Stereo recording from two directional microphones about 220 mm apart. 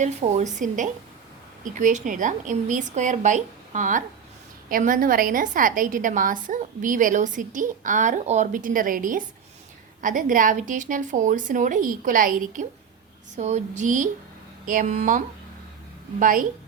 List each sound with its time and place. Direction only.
0.0 s a woman's voice: 30° right (ahead or behind)
16.2 s a woman's voice: 40° right (ahead or behind)